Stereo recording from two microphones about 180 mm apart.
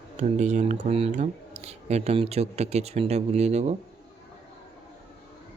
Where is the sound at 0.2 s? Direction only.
40° right (ahead or behind).